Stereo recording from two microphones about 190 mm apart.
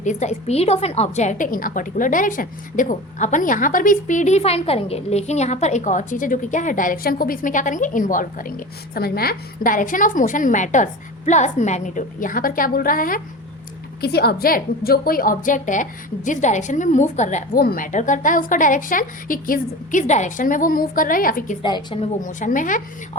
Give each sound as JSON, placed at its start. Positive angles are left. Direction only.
{"t": 0.0, "sound": "a woman's voice", "side_deg": 40}
{"t": 21.6, "sound": "a woman's voice", "side_deg": 25}
{"t": 22.2, "sound": "a woman's voice", "side_deg": 40}